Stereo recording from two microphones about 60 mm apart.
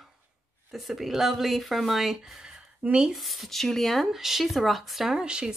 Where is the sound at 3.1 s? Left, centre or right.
Centre.